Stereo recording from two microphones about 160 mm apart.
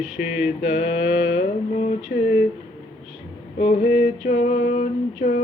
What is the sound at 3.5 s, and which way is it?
Female singing, 45° left (ahead or behind).